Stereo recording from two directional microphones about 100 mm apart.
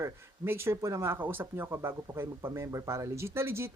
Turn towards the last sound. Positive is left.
turn(degrees=-25)  # may be behind; listen again after turning